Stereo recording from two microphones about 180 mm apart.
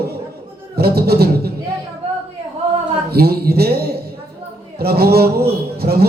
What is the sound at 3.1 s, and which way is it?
A man's voice, 60° right (ahead or behind).